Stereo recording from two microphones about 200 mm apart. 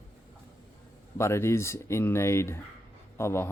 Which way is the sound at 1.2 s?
15° left (ahead or behind).